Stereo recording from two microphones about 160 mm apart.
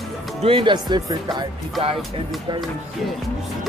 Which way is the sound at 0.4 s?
35° right (ahead or behind).